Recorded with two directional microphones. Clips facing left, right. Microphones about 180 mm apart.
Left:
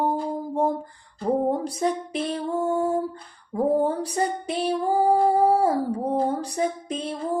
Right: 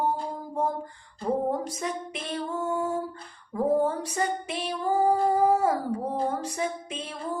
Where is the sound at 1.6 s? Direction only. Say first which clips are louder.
Left 6 dB; 35° left (ahead or behind).